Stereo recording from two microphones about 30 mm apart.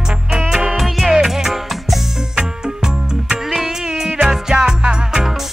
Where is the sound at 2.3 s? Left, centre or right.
Right.